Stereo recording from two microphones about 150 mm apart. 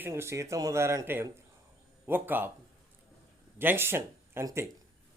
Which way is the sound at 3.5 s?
15° right (ahead or behind).